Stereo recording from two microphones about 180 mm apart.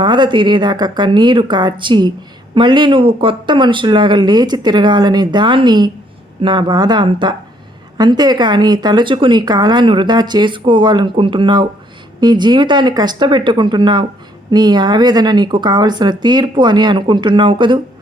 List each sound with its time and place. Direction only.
0.0 s speech: 25° right (ahead or behind)